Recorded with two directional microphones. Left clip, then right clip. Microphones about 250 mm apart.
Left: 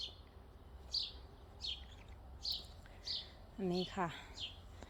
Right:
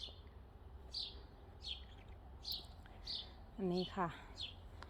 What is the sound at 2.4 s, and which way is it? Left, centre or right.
Bird, left.